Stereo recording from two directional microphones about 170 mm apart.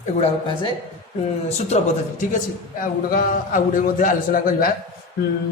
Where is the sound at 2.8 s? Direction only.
55° left (ahead or behind).